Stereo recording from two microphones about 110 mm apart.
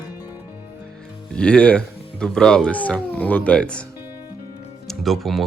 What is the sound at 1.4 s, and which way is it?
Speech, 10° left (ahead or behind).